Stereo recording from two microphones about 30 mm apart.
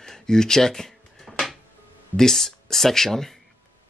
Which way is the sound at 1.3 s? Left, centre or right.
Centre.